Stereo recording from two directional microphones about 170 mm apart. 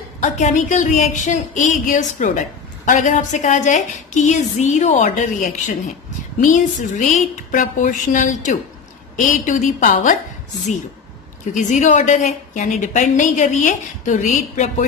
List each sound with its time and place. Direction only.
0.2 s a woman's voice: 45° left (ahead or behind)
11.5 s a woman's voice: 45° left (ahead or behind)